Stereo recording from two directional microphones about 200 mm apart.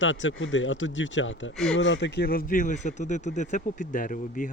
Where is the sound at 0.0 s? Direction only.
70° left (ahead or behind).